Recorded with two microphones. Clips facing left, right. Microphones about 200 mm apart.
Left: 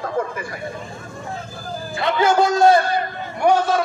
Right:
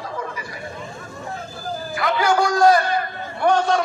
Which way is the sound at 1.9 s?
25° left (ahead or behind).